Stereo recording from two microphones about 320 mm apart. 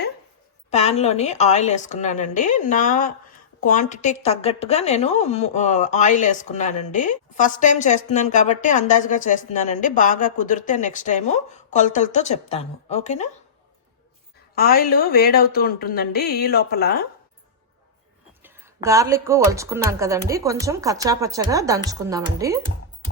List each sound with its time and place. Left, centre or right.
0.7 s a woman's voice: centre
14.5 s a woman's voice: left
18.4 s speech: centre